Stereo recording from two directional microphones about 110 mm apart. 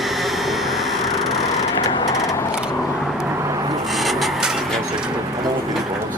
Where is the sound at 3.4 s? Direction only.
30° right (ahead or behind).